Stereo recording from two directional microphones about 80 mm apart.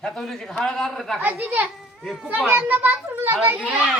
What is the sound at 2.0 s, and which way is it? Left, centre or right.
Speech, centre.